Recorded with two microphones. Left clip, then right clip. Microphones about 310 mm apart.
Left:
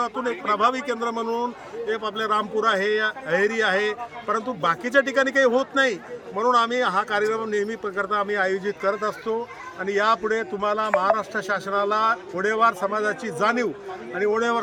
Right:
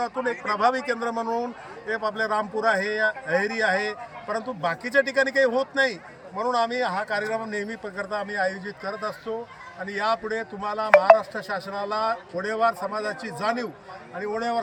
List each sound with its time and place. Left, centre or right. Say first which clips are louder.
0.0 s a man's voice: left 1 dB; centre